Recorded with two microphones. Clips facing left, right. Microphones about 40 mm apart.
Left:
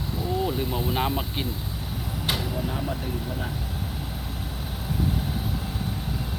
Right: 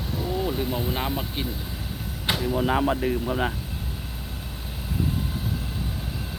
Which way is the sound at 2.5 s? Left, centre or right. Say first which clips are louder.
Right 7 dB; right.